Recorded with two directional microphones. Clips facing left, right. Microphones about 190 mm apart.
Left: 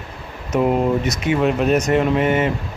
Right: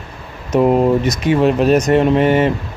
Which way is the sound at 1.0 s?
35° right (ahead or behind).